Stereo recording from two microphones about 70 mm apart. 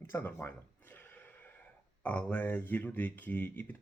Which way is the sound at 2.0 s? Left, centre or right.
Left.